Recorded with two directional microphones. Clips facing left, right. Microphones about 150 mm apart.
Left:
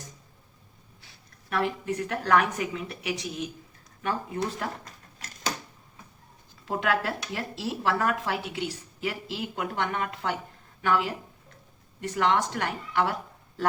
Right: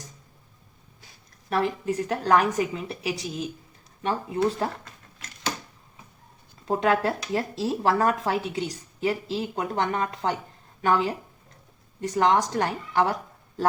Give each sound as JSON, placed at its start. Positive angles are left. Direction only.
{"t": 1.0, "sound": "a woman's voice", "side_deg": -35}
{"t": 6.7, "sound": "speech", "side_deg": -35}